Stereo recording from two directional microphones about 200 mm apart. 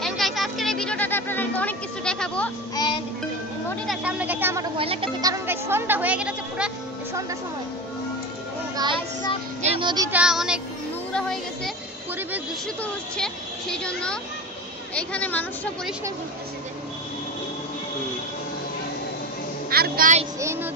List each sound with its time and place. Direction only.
0.0 s a sound: centre (ahead or behind)
2.7 s music: 20° left (ahead or behind)
3.8 s a woman's voice: 5° right (ahead or behind)
4.7 s a woman's voice: 25° right (ahead or behind); by 6.7 s 5° right (ahead or behind)
9.6 s speech: 30° right (ahead or behind)
10.1 s speech: 5° right (ahead or behind)
12.8 s a woman's voice: 5° left (ahead or behind)
19.7 s a woman's voice: 45° right (ahead or behind)
20.3 s speech: 10° right (ahead or behind)